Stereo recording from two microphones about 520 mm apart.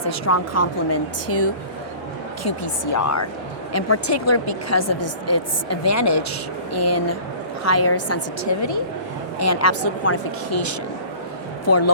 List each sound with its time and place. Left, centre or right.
0.0 s a woman's voice: left